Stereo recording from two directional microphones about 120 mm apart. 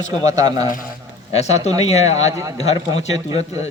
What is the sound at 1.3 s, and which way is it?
A man's voice, 65° left (ahead or behind).